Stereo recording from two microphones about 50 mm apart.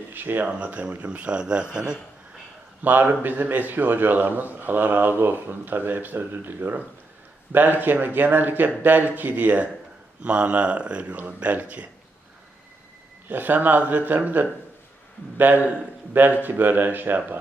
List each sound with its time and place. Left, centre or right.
0.1 s speech: right
0.4 s speech: right
2.8 s a man's voice: right
13.2 s a man's voice: right